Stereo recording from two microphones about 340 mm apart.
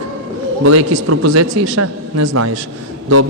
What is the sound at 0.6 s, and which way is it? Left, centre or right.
Speech, right.